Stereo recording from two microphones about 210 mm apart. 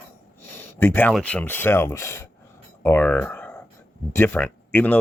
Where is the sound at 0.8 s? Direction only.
10° left (ahead or behind).